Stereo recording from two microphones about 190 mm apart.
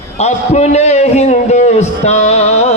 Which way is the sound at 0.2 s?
35° left (ahead or behind).